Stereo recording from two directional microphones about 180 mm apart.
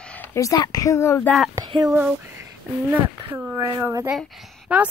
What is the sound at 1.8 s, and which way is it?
Speech, 10° right (ahead or behind).